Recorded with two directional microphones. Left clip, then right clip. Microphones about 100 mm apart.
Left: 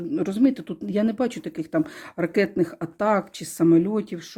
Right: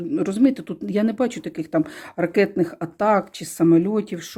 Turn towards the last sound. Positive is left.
turn(degrees=-10)  # may be behind; listen again after turning